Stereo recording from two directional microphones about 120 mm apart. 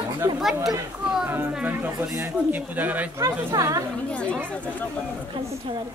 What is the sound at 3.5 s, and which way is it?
Speech, 25° right (ahead or behind).